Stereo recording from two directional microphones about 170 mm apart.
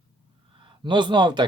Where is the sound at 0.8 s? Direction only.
25° right (ahead or behind).